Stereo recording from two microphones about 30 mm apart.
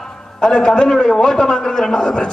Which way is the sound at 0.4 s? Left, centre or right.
Left.